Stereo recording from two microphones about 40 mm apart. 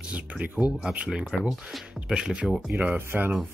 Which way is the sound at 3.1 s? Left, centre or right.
Right.